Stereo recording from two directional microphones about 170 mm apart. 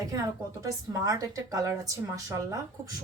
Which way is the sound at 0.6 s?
20° right (ahead or behind).